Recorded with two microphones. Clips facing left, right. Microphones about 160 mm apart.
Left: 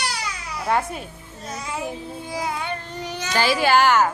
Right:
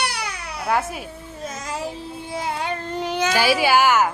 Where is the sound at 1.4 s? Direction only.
45° right (ahead or behind).